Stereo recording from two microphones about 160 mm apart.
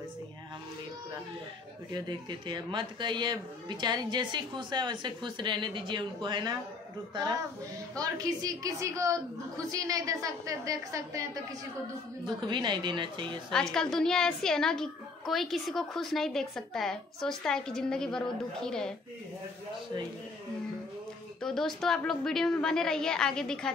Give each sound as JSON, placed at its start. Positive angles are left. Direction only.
{"t": 2.0, "sound": "speech", "side_deg": -25}
{"t": 8.0, "sound": "speech", "side_deg": -20}
{"t": 12.4, "sound": "speech", "side_deg": -30}
{"t": 13.5, "sound": "a woman's voice", "side_deg": 5}
{"t": 21.4, "sound": "a woman's voice", "side_deg": 5}